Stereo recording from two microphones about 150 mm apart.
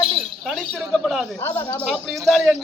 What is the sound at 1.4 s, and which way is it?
Speech, 25° left (ahead or behind).